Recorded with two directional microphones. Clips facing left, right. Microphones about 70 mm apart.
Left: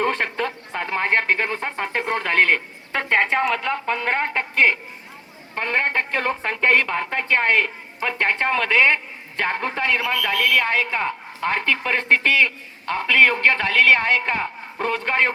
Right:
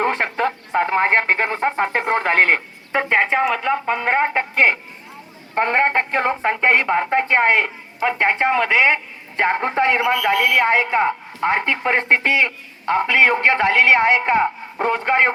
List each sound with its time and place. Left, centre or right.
0.0 s a woman's voice: right
2.9 s a woman's voice: centre
9.4 s a woman's voice: right